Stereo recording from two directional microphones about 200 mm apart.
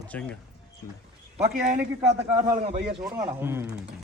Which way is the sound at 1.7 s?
15° right (ahead or behind).